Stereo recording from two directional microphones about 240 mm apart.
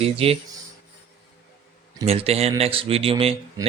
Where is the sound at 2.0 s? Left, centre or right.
Right.